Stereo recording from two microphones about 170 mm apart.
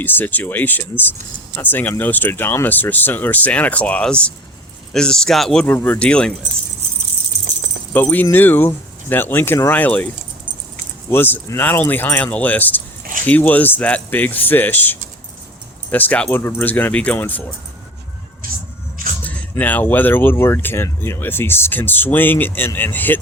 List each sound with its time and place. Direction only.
0.0 s speech: 10° left (ahead or behind)
7.9 s speech: 10° left (ahead or behind)
11.1 s speech: 15° left (ahead or behind)
18.4 s music: 55° right (ahead or behind)
19.2 s speech: 10° left (ahead or behind)